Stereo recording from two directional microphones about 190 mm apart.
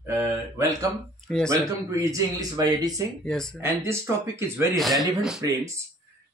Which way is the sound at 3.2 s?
5° left (ahead or behind).